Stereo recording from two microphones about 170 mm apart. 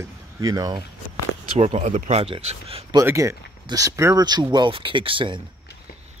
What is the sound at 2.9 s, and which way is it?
Speech, 15° right (ahead or behind).